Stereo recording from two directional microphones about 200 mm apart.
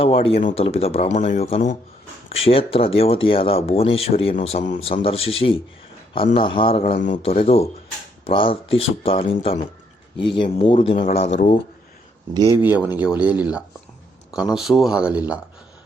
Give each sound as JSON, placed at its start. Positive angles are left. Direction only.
{"t": 0.0, "sound": "speech", "side_deg": 25}
{"t": 6.3, "sound": "speech", "side_deg": 25}
{"t": 6.9, "sound": "speech", "side_deg": 40}
{"t": 12.3, "sound": "speech", "side_deg": -15}